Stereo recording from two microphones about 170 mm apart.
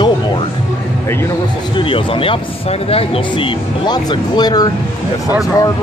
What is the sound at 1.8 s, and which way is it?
Speech, 30° left (ahead or behind).